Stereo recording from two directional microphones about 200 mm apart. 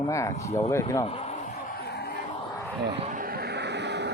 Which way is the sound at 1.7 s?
50° left (ahead or behind).